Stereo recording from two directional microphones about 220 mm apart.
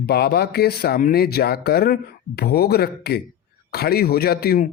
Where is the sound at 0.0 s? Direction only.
45° left (ahead or behind).